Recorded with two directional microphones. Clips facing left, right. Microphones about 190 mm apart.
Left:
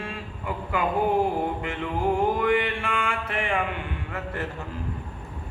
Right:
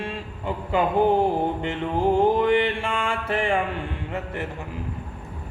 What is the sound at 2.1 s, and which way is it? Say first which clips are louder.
Mantra: right 4 dB; 25° right (ahead or behind).